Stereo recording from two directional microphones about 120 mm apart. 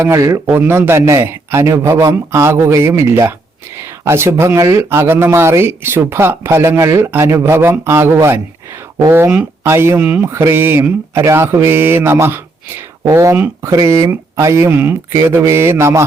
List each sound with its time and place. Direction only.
0.0 s speech: 25° right (ahead or behind)